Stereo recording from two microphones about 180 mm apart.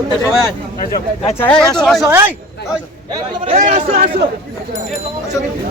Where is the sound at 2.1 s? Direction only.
10° right (ahead or behind).